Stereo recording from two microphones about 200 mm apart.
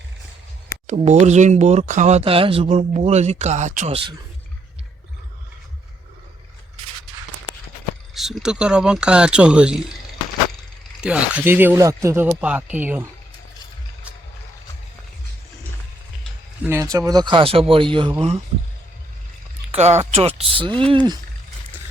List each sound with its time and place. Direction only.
0.9 s speech: 35° right (ahead or behind)
8.1 s speech: centre (ahead or behind)
11.0 s speech: 5° right (ahead or behind)
16.6 s speech: 15° right (ahead or behind)
19.7 s speech: 35° right (ahead or behind)